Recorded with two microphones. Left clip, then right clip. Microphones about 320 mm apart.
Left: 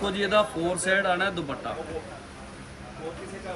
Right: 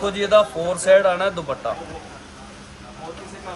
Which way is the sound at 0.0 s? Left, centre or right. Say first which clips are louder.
Right 7 dB; right.